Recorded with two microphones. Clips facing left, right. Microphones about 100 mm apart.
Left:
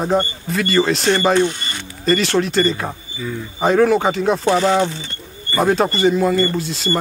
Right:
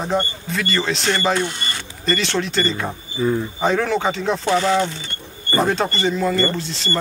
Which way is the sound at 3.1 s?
40° right (ahead or behind).